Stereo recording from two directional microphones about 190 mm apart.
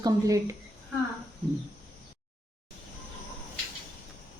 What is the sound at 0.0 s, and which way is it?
Speech, 15° right (ahead or behind).